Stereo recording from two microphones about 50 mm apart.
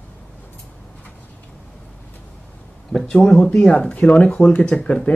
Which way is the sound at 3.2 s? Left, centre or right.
Centre.